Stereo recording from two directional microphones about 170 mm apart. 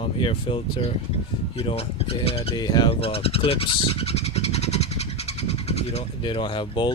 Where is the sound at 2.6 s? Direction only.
25° left (ahead or behind).